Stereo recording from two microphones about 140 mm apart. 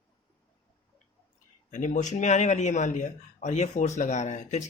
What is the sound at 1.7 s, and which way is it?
Speech, 65° left (ahead or behind).